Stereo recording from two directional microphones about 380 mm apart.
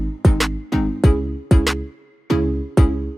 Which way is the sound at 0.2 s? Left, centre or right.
Centre.